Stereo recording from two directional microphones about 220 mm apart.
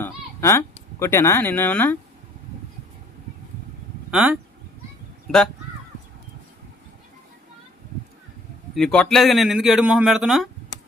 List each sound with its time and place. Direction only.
0.0 s speech: 10° left (ahead or behind)
4.1 s speech: 5° right (ahead or behind)
8.7 s a man's voice: 5° left (ahead or behind)